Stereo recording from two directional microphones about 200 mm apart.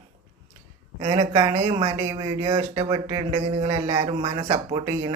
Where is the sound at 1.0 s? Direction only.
25° right (ahead or behind).